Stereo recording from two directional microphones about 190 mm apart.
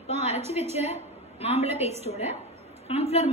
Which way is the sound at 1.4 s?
35° left (ahead or behind).